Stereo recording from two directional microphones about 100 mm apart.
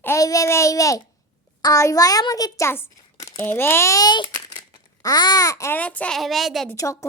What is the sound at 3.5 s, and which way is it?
A child's voice, 20° left (ahead or behind).